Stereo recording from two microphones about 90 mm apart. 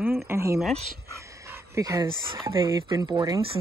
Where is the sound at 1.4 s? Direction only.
30° right (ahead or behind).